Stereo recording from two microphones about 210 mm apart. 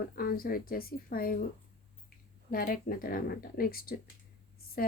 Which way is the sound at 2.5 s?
45° left (ahead or behind).